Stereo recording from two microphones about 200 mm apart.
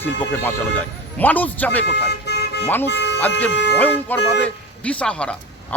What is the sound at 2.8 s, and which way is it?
Speech, 60° left (ahead or behind).